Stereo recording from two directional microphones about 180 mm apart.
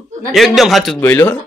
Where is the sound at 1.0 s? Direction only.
10° left (ahead or behind).